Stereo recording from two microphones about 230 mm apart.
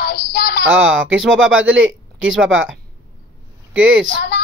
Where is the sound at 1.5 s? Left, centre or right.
Right.